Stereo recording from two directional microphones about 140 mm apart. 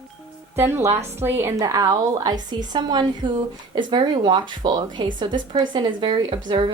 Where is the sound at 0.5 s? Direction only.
15° right (ahead or behind).